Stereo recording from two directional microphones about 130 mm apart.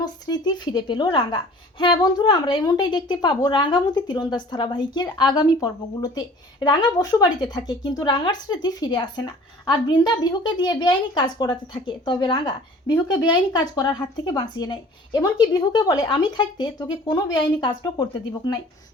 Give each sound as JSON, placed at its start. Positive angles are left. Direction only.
{"t": 0.0, "sound": "a woman's voice", "side_deg": 30}